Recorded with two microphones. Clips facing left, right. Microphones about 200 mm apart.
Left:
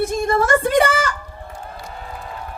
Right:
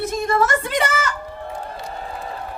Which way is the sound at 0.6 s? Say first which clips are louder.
Left 6 dB; 50° left (ahead or behind).